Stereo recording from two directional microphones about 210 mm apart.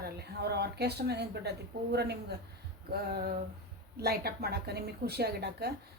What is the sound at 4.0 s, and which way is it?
A woman's voice, 50° right (ahead or behind).